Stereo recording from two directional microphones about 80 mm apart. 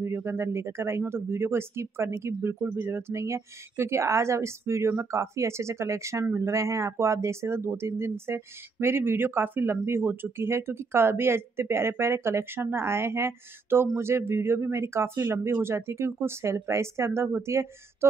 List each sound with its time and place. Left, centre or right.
0.0 s speech: right